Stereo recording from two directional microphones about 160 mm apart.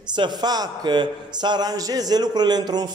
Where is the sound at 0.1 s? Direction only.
25° right (ahead or behind).